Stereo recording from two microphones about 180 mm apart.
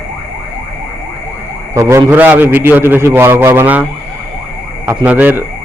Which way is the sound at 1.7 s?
15° right (ahead or behind).